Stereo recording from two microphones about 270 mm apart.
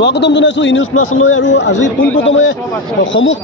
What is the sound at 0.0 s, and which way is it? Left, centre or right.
A man's voice, left.